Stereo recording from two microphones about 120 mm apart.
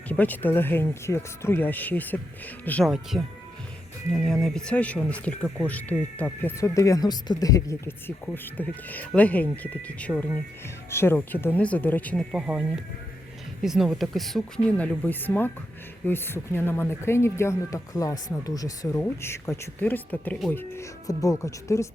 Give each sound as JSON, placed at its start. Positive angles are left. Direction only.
{"t": 0.1, "sound": "speech", "side_deg": 15}
{"t": 2.8, "sound": "speech", "side_deg": 0}
{"t": 6.6, "sound": "speech", "side_deg": 25}
{"t": 12.3, "sound": "speech", "side_deg": -5}
{"t": 21.1, "sound": "speech", "side_deg": 30}